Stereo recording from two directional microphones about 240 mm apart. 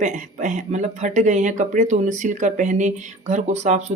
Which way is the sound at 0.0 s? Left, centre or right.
Right.